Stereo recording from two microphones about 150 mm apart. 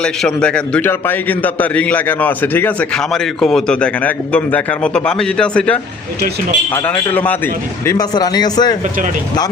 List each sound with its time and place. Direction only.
0.0 s a man's voice: 5° left (ahead or behind)
6.8 s a man's voice: 10° left (ahead or behind)
7.9 s speech: 25° left (ahead or behind)